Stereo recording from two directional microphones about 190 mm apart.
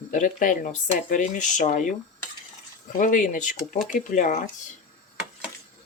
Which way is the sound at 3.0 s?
45° left (ahead or behind).